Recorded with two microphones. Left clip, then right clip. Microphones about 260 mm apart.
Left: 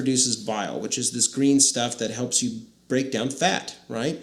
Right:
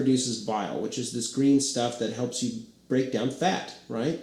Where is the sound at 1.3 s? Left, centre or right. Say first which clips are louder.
Left 2 dB; left.